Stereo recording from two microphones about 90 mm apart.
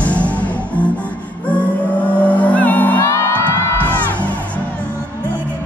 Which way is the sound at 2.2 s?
15° left (ahead or behind).